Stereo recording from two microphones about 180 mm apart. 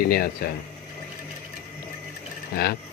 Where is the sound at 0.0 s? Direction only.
55° left (ahead or behind).